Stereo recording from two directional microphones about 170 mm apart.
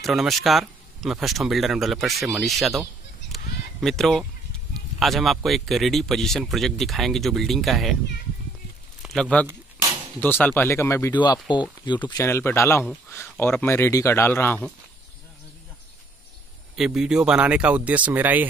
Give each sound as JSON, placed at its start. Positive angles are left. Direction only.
{"t": 0.0, "sound": "speech", "side_deg": 0}
{"t": 3.3, "sound": "fowl", "side_deg": 0}
{"t": 4.9, "sound": "speech", "side_deg": 0}
{"t": 9.0, "sound": "speech", "side_deg": 0}
{"t": 11.5, "sound": "speech", "side_deg": 25}
{"t": 16.7, "sound": "speech", "side_deg": -5}